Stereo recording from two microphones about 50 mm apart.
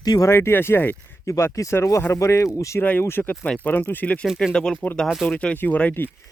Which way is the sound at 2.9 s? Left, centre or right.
Left.